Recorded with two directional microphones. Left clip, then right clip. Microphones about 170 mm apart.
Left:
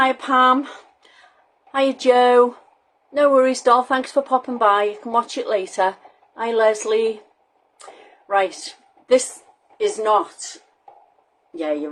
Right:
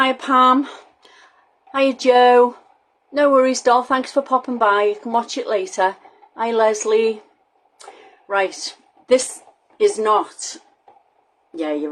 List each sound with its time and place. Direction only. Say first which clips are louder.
0.0 s speech: right 1 dB; 25° right (ahead or behind)
1.7 s a woman's voice: right 1 dB; 15° right (ahead or behind)
7.8 s a sound: right 1 dB; 10° right (ahead or behind)
9.7 s speech: right 2 dB; 35° right (ahead or behind)
11.5 s speech: right 1 dB; 30° right (ahead or behind)